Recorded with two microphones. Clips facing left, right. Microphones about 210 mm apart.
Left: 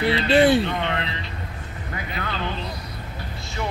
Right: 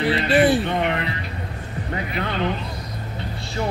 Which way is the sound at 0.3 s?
5° right (ahead or behind).